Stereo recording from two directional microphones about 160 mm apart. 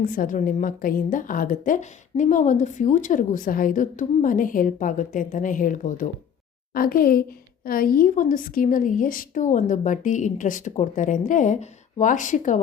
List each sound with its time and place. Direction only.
0.0 s a woman's voice: 60° left (ahead or behind)
6.7 s a woman's voice: 65° left (ahead or behind)